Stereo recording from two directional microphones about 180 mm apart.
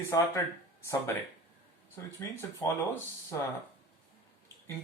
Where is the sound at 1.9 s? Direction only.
15° left (ahead or behind).